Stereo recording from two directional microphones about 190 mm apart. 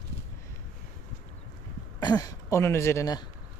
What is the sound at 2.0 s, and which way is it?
Speech, 20° left (ahead or behind).